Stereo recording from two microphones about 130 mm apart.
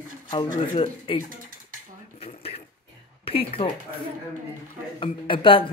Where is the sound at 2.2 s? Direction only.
50° left (ahead or behind).